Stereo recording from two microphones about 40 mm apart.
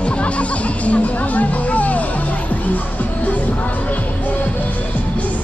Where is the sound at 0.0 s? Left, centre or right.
Left.